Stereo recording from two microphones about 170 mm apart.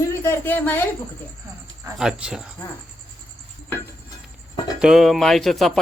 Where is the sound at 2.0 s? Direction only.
5° right (ahead or behind).